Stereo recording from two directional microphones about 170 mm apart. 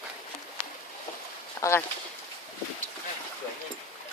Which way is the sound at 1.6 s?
15° left (ahead or behind).